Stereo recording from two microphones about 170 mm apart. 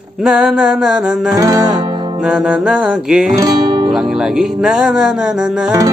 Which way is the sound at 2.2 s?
5° right (ahead or behind).